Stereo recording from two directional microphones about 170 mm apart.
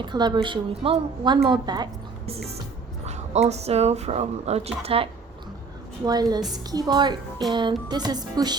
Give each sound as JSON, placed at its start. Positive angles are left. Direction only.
{"t": 0.0, "sound": "a woman's voice", "side_deg": -25}
{"t": 3.1, "sound": "speech", "side_deg": -40}
{"t": 6.1, "sound": "a woman's voice", "side_deg": -25}